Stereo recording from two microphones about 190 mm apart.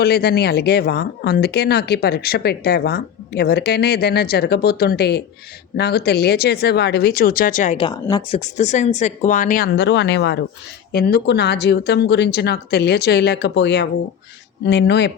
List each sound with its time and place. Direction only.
0.0 s speech: 55° left (ahead or behind)
9.7 s speech: 65° left (ahead or behind)